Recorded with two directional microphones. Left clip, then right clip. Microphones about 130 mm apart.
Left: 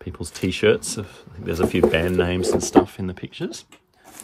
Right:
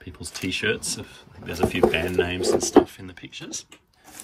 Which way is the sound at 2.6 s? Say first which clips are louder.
Even; 70° left (ahead or behind).